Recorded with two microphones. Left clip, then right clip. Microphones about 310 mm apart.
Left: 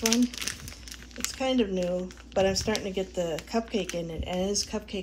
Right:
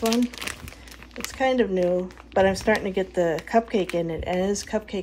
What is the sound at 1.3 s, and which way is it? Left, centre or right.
Speech, right.